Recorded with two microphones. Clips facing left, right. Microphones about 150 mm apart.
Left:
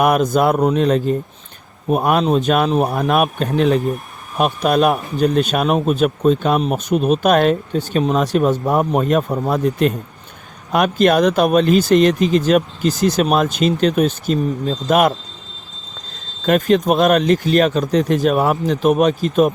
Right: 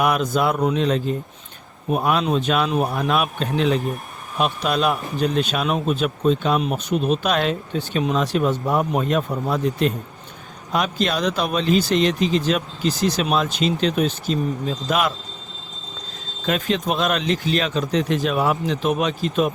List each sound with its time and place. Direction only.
0.0 s speech: 50° left (ahead or behind)
16.5 s speech: 45° left (ahead or behind)